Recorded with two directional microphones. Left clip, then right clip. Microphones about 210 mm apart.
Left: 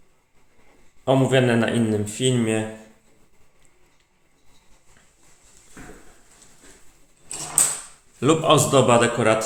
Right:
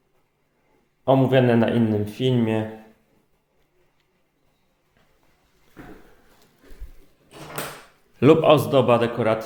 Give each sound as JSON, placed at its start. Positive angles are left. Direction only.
{"t": 1.0, "sound": "a man's voice", "side_deg": -10}
{"t": 8.2, "sound": "a man's voice", "side_deg": -30}